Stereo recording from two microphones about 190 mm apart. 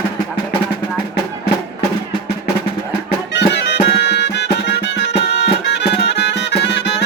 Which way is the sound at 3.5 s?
65° left (ahead or behind).